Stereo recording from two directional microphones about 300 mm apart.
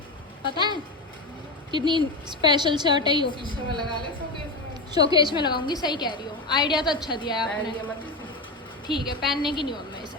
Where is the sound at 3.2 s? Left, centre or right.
Centre.